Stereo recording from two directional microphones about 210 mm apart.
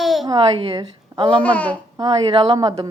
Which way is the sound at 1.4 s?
5° left (ahead or behind).